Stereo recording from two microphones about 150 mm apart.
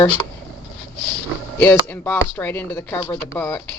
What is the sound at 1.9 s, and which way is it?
A woman's voice, 15° left (ahead or behind).